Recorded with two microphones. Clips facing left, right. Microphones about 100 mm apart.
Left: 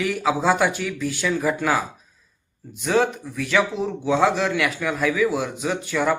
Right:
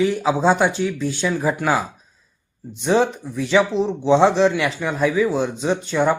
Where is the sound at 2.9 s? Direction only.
20° right (ahead or behind).